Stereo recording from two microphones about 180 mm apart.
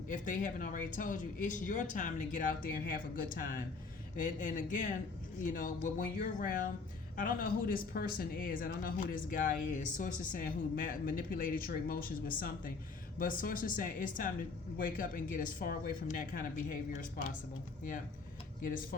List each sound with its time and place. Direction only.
0.1 s speech: 45° left (ahead or behind)
18.6 s speech: 50° left (ahead or behind)